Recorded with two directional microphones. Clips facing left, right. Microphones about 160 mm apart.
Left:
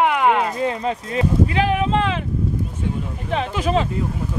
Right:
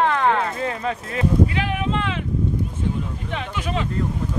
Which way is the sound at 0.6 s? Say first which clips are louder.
Left 3 dB; 25° left (ahead or behind).